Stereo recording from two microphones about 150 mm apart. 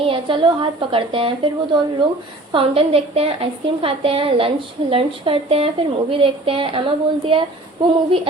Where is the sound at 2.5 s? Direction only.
40° right (ahead or behind).